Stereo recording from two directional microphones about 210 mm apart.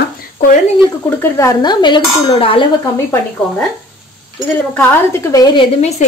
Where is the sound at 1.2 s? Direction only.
15° left (ahead or behind).